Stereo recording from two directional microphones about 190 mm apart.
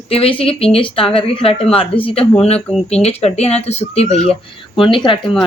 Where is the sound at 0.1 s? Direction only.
30° left (ahead or behind).